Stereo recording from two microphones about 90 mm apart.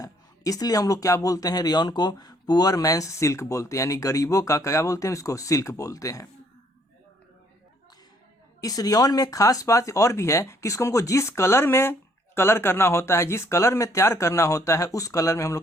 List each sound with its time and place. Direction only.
0.0 s speech: 40° left (ahead or behind)
8.6 s speech: 45° left (ahead or behind)